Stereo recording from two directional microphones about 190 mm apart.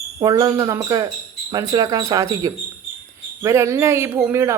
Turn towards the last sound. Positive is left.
turn(degrees=-15)  # may be behind; listen again after turning